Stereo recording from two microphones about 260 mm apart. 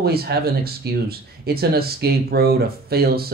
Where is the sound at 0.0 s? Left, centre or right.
Right.